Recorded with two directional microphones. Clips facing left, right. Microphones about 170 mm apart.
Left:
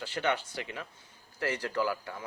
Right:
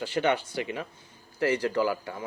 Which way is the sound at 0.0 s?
20° right (ahead or behind).